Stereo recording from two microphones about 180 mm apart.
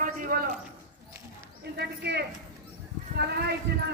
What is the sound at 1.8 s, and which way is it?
Speech, 65° right (ahead or behind).